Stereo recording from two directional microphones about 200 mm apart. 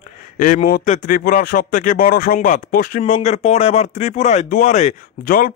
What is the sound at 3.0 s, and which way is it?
Speech, 35° left (ahead or behind).